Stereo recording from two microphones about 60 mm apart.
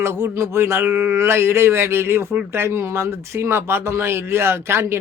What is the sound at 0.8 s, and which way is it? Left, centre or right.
Speech, right.